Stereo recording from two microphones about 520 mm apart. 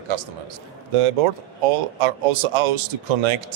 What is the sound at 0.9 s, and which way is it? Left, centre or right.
Speech, right.